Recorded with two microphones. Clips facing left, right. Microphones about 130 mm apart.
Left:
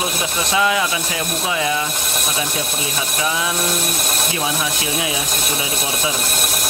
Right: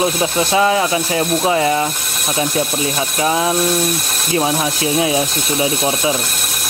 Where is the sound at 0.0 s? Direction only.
30° right (ahead or behind).